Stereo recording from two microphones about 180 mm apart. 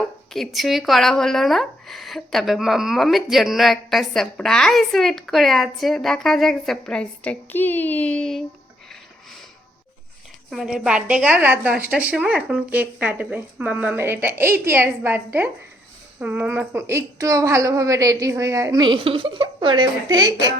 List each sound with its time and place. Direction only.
0.3 s a woman's voice: centre (ahead or behind)
10.5 s a woman's voice: 5° right (ahead or behind); by 20.3 s 25° right (ahead or behind)